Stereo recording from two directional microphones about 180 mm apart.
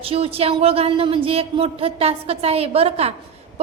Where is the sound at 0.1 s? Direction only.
35° right (ahead or behind).